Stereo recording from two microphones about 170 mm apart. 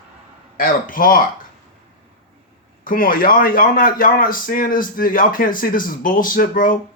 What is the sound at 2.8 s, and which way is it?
A man's voice, 55° left (ahead or behind).